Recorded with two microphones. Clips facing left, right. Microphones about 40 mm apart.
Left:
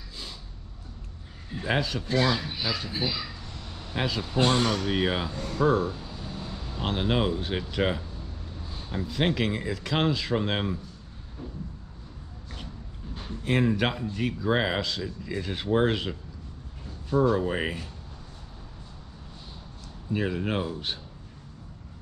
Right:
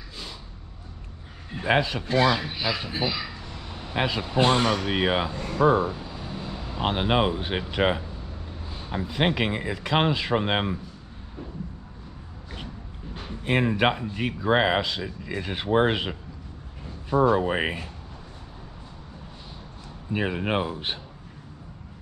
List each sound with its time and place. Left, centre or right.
1.5 s speech: right
13.3 s speech: right
20.1 s speech: right